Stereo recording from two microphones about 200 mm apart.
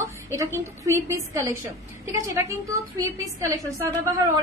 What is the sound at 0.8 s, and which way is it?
A woman's voice, 15° right (ahead or behind).